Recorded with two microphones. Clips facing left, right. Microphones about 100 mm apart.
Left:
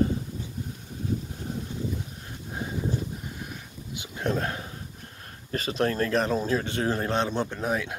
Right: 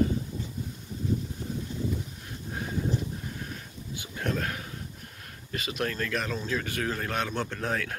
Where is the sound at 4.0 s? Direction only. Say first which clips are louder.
Left 3 dB; 20° left (ahead or behind).